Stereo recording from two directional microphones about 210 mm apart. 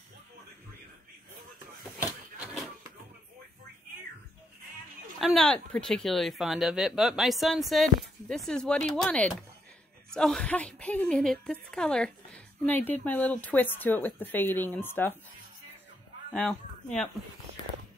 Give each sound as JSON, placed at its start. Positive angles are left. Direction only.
{"t": 2.0, "sound": "a sound", "side_deg": -5}
{"t": 5.2, "sound": "a woman's voice", "side_deg": 0}
{"t": 16.3, "sound": "speech", "side_deg": 5}